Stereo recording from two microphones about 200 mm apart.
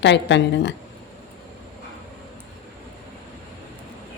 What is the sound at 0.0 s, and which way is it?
Speech, 60° left (ahead or behind).